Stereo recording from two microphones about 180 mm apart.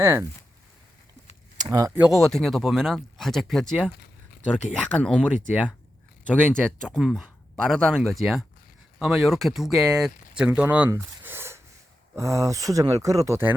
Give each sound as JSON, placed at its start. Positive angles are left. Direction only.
{"t": 0.0, "sound": "speech", "side_deg": -15}
{"t": 1.5, "sound": "a sound", "side_deg": -20}
{"t": 2.0, "sound": "speech", "side_deg": 0}
{"t": 6.5, "sound": "speech", "side_deg": 5}